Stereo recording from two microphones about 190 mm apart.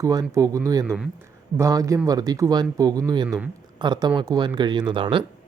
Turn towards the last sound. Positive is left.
turn(degrees=-25)  # may be behind; listen again after turning